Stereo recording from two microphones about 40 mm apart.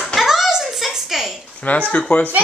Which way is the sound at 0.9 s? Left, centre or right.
Centre.